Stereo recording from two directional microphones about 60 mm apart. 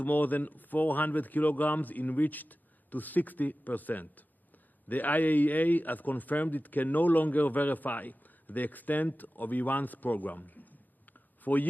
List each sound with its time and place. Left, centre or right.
0.0 s speech: left